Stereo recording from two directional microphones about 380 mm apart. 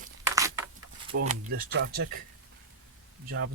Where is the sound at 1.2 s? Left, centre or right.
Right.